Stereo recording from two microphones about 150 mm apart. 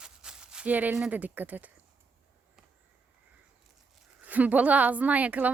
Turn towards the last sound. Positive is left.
turn(degrees=-10)  # may be behind; listen again after turning